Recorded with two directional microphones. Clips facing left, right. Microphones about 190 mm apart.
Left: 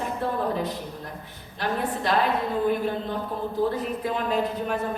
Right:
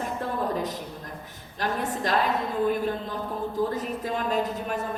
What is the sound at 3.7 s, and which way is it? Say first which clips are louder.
Speech: left 2 dB; 45° right (ahead or behind).